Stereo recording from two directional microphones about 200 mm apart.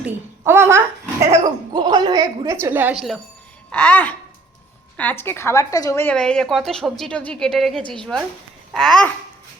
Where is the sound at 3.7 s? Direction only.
10° left (ahead or behind).